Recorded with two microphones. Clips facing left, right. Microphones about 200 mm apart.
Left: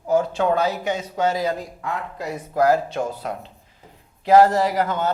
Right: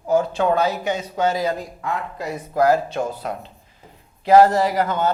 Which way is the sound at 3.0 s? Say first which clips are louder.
Right 1 dB; 35° right (ahead or behind).